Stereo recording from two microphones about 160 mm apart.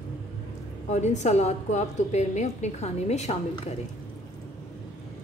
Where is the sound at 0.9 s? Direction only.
45° left (ahead or behind).